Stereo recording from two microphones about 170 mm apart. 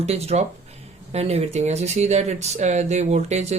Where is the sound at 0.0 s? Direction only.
40° right (ahead or behind).